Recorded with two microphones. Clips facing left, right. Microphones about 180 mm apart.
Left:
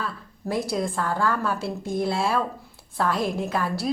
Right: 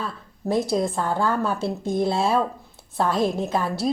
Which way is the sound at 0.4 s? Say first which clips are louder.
Right 4 dB; 20° right (ahead or behind).